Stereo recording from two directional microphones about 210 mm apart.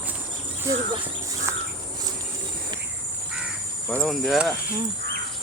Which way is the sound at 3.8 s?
5° left (ahead or behind).